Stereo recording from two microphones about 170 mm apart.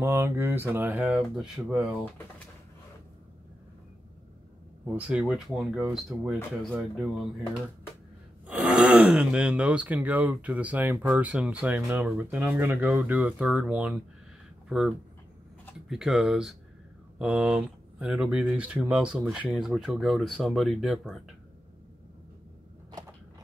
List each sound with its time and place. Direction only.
0.0 s speech: 15° right (ahead or behind)
4.8 s speech: 10° right (ahead or behind)
8.5 s speech: 5° right (ahead or behind)